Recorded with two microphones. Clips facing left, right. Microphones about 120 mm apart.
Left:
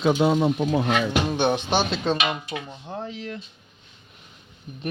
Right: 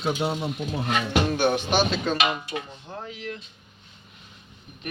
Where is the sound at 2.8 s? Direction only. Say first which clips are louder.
Left 4 dB; 30° left (ahead or behind).